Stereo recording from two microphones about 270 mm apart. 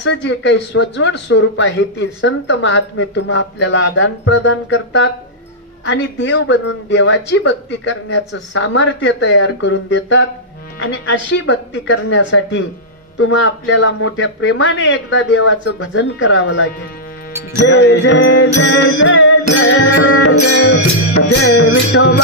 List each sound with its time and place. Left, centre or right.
0.0 s speech: left
17.6 s speech: left